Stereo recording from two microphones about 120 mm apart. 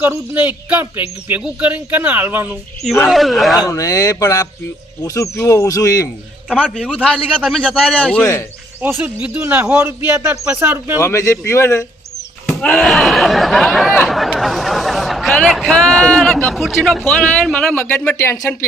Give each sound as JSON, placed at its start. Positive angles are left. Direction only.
{"t": 0.0, "sound": "speech", "side_deg": -15}
{"t": 3.1, "sound": "speech", "side_deg": 0}
{"t": 3.6, "sound": "speech", "side_deg": 30}
{"t": 6.5, "sound": "speech", "side_deg": -5}
{"t": 6.9, "sound": "speech", "side_deg": 10}
{"t": 8.8, "sound": "speech", "side_deg": -15}
{"t": 11.0, "sound": "speech", "side_deg": 25}
{"t": 12.5, "sound": "speech", "side_deg": 5}
{"t": 14.1, "sound": "chatter", "side_deg": 0}
{"t": 16.5, "sound": "speech", "side_deg": 0}
{"t": 18.2, "sound": "speech", "side_deg": 25}